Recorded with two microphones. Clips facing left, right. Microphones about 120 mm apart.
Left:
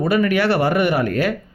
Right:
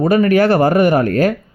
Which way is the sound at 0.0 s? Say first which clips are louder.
Right 5 dB; 40° right (ahead or behind).